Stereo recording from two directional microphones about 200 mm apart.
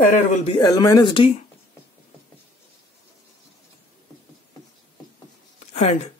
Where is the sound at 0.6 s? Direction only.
20° left (ahead or behind).